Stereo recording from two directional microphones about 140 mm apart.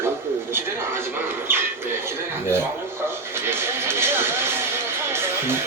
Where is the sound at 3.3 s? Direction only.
15° right (ahead or behind).